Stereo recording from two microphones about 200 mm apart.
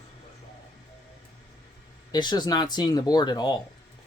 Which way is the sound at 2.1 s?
20° left (ahead or behind).